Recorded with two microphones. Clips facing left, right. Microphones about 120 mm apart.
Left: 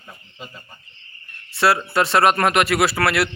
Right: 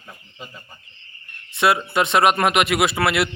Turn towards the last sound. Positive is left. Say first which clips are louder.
# even
turn(degrees=-20)  # may be behind; listen again after turning